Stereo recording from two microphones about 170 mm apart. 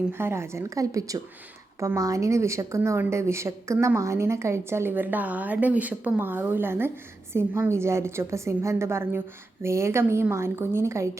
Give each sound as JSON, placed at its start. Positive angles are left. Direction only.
{"t": 0.1, "sound": "a woman's voice", "side_deg": -15}